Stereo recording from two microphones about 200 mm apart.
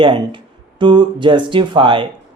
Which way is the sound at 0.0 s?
25° right (ahead or behind).